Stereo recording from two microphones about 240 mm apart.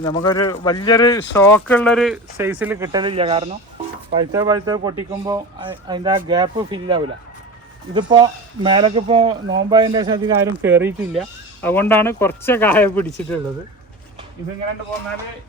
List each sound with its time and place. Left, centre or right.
0.0 s speech: centre
2.4 s speech: centre